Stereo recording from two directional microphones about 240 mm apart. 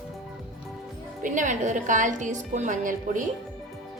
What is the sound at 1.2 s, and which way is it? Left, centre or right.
A woman's voice, right.